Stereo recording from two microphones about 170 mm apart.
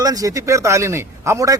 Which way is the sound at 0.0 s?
20° right (ahead or behind).